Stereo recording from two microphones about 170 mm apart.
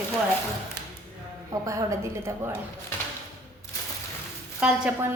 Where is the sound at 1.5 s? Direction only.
20° right (ahead or behind).